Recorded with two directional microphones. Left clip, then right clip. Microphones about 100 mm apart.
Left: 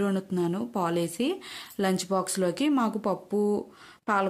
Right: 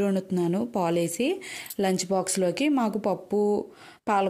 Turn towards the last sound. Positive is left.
turn(degrees=-35)  # may be behind; listen again after turning